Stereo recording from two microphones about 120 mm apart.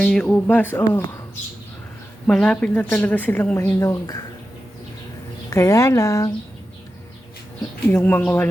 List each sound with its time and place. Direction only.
0.0 s a woman's voice: 5° left (ahead or behind)
2.2 s a woman's voice: 10° left (ahead or behind); by 4.2 s 30° left (ahead or behind)
5.5 s speech: 25° left (ahead or behind)
7.9 s a woman's voice: 15° left (ahead or behind)